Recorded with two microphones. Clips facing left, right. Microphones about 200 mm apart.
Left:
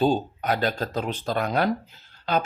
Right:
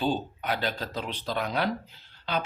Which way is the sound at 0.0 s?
45° left (ahead or behind).